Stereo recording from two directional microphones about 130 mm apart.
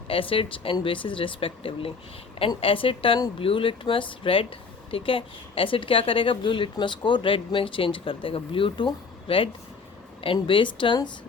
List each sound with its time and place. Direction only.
0.1 s a woman's voice: 45° left (ahead or behind)